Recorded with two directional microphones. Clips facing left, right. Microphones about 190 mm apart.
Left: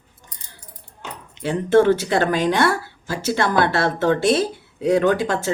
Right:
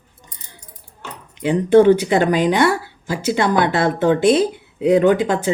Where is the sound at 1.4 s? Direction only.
15° right (ahead or behind).